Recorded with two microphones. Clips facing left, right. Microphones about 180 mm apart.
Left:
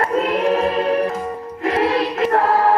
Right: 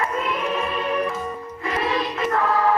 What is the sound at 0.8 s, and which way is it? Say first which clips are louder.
Organ: left 6 dB; 75° left (ahead or behind).